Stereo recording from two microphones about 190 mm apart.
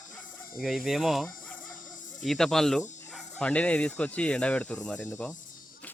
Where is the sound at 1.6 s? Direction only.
45° left (ahead or behind).